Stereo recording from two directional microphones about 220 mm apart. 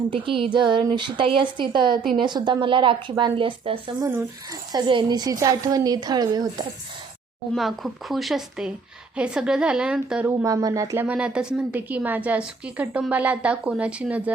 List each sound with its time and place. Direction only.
0.1 s a woman's voice: 25° right (ahead or behind)
7.5 s a woman's voice: centre (ahead or behind)